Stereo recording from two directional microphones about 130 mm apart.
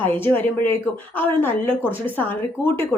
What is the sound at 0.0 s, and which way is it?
A woman's voice, 15° left (ahead or behind).